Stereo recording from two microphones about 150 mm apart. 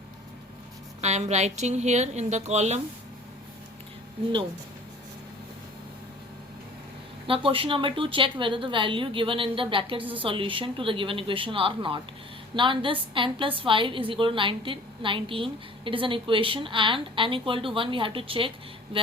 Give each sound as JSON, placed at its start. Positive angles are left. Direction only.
{"t": 1.0, "sound": "a woman's voice", "side_deg": -50}
{"t": 7.3, "sound": "a woman's voice", "side_deg": -35}